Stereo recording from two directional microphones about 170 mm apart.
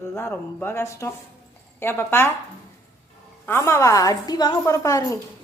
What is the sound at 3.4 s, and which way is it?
A woman's voice, 15° left (ahead or behind).